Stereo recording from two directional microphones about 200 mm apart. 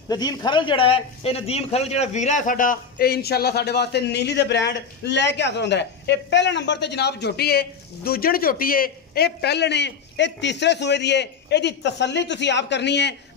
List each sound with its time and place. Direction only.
0.1 s speech: 20° left (ahead or behind); by 13.1 s 60° left (ahead or behind)